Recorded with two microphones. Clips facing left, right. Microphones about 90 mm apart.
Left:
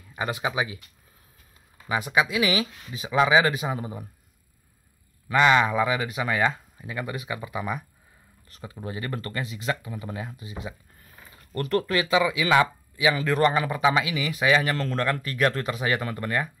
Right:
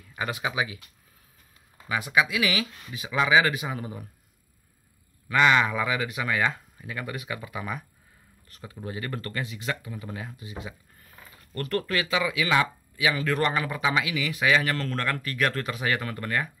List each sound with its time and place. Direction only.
0.1 s speech: 25° left (ahead or behind)
1.9 s speech: 30° left (ahead or behind)
5.3 s speech: 25° left (ahead or behind)
8.5 s speech: 30° left (ahead or behind)